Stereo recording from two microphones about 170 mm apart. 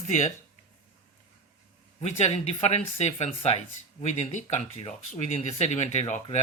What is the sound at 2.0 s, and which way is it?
Speech, 40° left (ahead or behind).